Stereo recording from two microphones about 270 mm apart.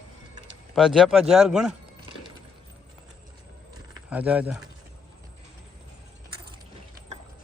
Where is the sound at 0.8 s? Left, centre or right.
Centre.